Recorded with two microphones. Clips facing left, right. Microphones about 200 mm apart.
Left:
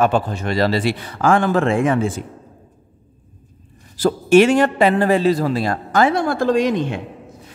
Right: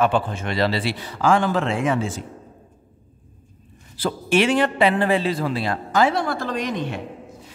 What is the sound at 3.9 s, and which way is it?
A man's voice, 45° left (ahead or behind).